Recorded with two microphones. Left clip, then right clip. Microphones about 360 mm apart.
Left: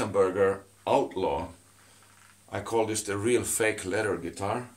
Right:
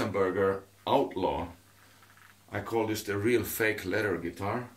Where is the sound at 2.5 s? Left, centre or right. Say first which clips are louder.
Left 3 dB; centre.